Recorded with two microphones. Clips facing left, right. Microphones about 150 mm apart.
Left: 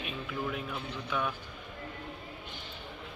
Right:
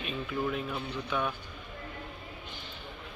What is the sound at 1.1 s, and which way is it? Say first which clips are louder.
Speech: right 1 dB; 5° left (ahead or behind).